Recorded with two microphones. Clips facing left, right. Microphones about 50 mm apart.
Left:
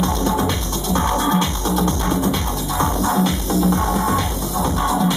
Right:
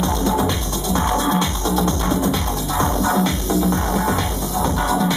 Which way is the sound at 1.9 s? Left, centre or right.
Centre.